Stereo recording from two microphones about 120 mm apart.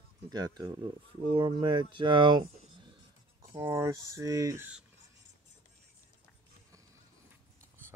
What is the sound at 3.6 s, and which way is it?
Speech, 20° right (ahead or behind).